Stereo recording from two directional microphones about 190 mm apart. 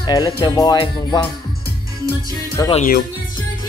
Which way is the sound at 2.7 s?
45° left (ahead or behind).